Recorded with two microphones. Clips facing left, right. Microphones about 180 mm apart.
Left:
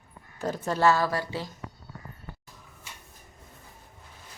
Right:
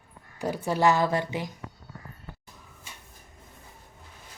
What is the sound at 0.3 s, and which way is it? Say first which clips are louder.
Speech: right 1 dB; 15° right (ahead or behind).